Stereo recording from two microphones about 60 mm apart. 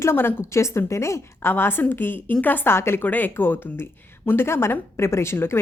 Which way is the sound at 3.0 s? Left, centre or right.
Left.